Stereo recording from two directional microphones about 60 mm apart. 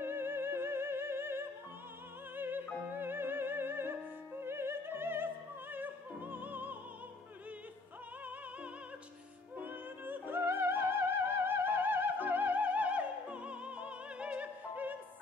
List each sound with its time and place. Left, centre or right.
0.0 s music: right
2.3 s opera: right
9.6 s music: right